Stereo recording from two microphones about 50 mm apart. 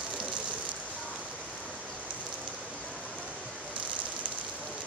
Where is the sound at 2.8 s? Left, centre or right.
Left.